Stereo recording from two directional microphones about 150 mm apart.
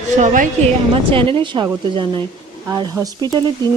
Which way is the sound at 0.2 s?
55° right (ahead or behind).